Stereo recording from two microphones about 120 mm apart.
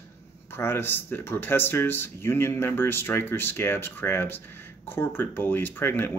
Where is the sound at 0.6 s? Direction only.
20° left (ahead or behind).